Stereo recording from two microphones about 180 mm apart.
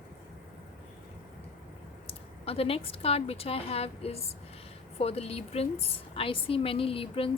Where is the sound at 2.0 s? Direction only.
35° left (ahead or behind).